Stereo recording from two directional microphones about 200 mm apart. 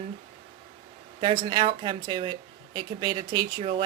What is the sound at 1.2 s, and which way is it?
Speech, 25° right (ahead or behind).